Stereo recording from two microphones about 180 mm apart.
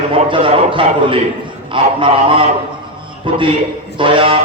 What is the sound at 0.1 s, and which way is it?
A man's voice, 30° right (ahead or behind).